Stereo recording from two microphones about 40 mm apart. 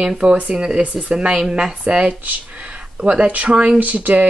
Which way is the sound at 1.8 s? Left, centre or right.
Right.